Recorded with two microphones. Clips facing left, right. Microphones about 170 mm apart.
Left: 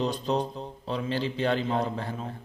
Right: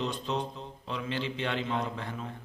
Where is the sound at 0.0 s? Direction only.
35° left (ahead or behind).